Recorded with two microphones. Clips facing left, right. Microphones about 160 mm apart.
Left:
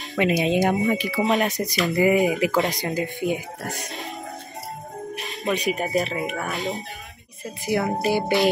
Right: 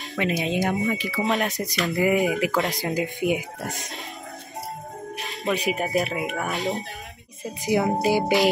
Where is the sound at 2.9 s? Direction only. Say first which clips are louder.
Right 1 dB; 15° right (ahead or behind).